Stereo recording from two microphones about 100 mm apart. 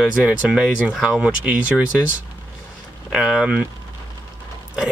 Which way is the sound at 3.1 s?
5° right (ahead or behind).